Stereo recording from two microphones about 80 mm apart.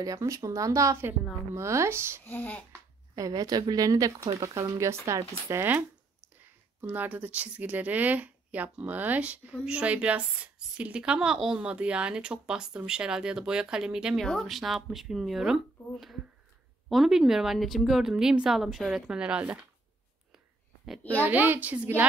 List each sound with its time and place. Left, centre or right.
0.0 s speech: right
2.2 s a child's voice: left
3.2 s speech: right
6.4 s speech: right
14.2 s a woman's voice: centre
21.2 s a child's voice: right